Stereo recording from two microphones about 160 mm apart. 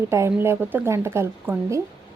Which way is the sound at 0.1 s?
15° right (ahead or behind).